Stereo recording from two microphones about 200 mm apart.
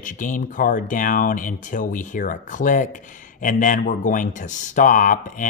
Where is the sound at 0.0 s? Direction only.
40° left (ahead or behind).